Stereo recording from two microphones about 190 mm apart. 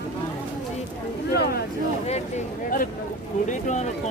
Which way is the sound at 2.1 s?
40° left (ahead or behind).